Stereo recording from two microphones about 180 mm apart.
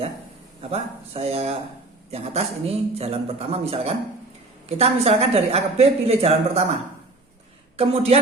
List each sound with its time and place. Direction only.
0.6 s speech: 35° right (ahead or behind)
7.8 s speech: 35° right (ahead or behind)